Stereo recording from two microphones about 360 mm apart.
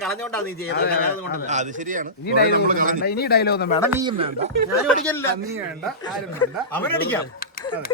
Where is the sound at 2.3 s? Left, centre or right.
Left.